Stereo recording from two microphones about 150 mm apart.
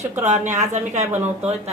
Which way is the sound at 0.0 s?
50° right (ahead or behind).